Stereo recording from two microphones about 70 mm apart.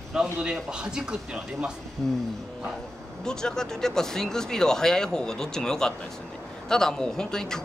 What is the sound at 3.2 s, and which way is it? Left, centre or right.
Speech, centre.